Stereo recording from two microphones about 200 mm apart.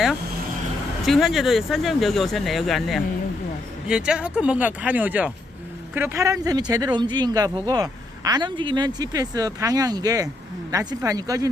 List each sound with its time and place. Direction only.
1.0 s speech: centre (ahead or behind); by 11.4 s 15° right (ahead or behind)